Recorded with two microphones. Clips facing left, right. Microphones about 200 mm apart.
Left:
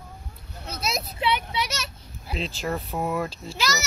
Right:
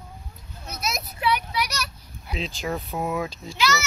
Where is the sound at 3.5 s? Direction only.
40° left (ahead or behind).